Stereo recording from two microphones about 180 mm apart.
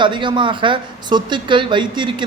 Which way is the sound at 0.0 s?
25° right (ahead or behind).